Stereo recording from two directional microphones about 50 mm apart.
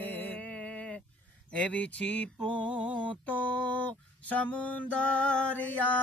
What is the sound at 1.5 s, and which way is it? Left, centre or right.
Speech, left.